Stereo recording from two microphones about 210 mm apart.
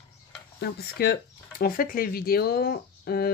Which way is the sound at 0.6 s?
50° left (ahead or behind).